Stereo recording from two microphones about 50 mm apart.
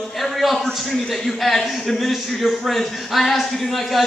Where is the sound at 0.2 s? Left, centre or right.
Centre.